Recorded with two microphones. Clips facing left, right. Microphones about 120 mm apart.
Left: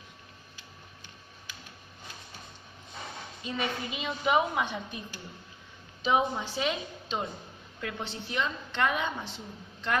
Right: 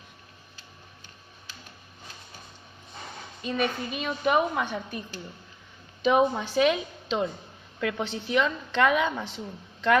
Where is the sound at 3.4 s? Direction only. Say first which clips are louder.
Right 6 dB; 65° right (ahead or behind).